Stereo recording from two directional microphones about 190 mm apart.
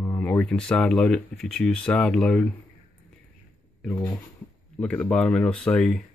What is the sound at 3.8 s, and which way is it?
Speech, 10° left (ahead or behind).